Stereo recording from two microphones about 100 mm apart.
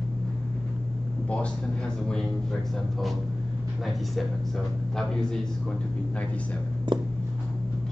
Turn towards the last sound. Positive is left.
turn(degrees=-55)  # may be behind; listen again after turning